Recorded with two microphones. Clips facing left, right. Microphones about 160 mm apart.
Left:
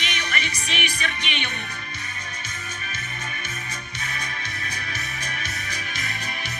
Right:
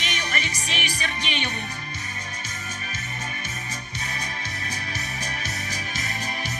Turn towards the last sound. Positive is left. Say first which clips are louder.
# right 1 dB
turn(degrees=-40)  # may be behind; listen again after turning